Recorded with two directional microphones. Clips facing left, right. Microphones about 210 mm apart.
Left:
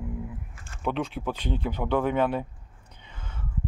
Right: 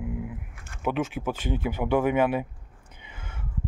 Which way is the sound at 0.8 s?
5° right (ahead or behind).